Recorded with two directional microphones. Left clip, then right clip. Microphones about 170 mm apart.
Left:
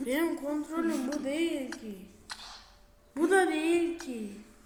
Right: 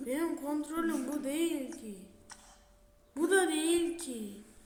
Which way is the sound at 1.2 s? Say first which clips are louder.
Left 2 dB; 15° right (ahead or behind).